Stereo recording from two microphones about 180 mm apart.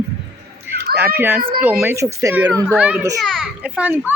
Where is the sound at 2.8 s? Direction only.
5° right (ahead or behind).